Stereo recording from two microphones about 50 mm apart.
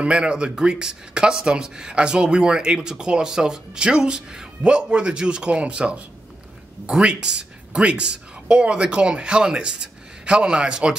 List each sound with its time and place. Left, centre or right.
0.0 s speech: centre